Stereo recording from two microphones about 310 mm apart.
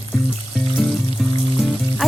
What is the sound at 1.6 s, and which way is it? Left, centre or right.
Music, centre.